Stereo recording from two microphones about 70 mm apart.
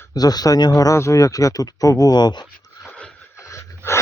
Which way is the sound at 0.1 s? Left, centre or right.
Left.